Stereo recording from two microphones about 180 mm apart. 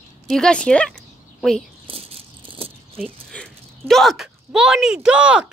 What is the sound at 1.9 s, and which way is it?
Rattle, 30° right (ahead or behind).